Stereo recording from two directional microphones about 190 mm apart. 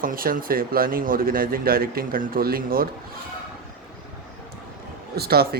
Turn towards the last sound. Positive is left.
turn(degrees=-55)  # may be behind; listen again after turning